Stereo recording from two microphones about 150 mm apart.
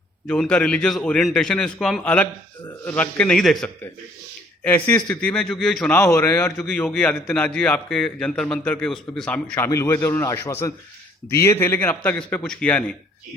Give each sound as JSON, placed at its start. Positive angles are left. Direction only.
{"t": 0.3, "sound": "a man's voice", "side_deg": 5}
{"t": 5.9, "sound": "a man's voice", "side_deg": 15}
{"t": 9.6, "sound": "a man's voice", "side_deg": 20}